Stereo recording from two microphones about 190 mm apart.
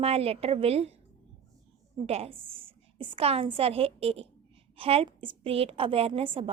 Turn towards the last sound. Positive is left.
turn(degrees=-30)  # may be behind; listen again after turning